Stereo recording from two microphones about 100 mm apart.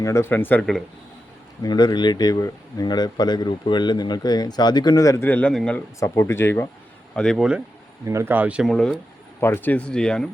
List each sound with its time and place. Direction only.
0.0 s speech: 30° left (ahead or behind)
1.6 s speech: 45° left (ahead or behind)
5.2 s speech: 15° left (ahead or behind)
6.0 s speech: 30° left (ahead or behind)
7.2 s speech: 5° left (ahead or behind)
8.0 s speech: 25° right (ahead or behind)
8.6 s speech: 5° left (ahead or behind)
9.4 s speech: 20° left (ahead or behind)